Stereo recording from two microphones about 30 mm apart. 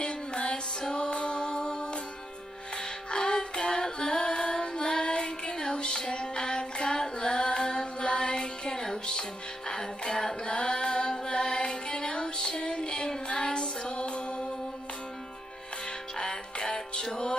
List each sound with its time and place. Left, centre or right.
0.0 s music: left
9.7 s female singing: centre; by 14.4 s left
16.2 s music: left